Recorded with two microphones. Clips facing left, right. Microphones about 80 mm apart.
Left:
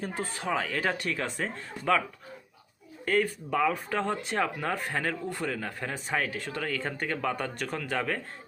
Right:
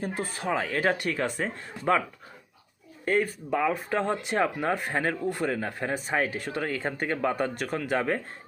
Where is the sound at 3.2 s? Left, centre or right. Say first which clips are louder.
Right 1 dB; centre.